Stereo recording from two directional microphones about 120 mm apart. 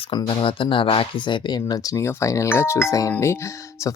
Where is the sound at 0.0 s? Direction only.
45° left (ahead or behind).